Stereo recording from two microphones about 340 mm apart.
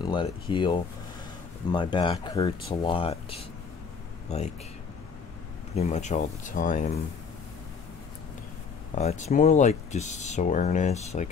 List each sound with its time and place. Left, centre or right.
0.0 s speech: centre
5.8 s speech: centre
8.9 s speech: left